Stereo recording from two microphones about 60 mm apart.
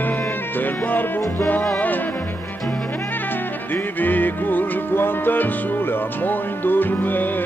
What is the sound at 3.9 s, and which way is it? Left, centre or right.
Music, left.